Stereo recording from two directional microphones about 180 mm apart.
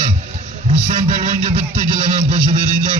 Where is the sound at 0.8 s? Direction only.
45° right (ahead or behind).